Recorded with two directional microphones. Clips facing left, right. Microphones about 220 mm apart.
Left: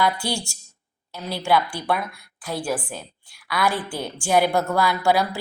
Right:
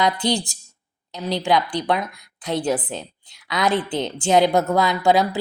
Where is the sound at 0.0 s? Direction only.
20° right (ahead or behind).